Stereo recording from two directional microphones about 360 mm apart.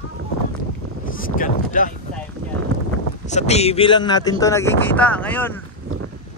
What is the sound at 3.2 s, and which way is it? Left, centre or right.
Speech, centre.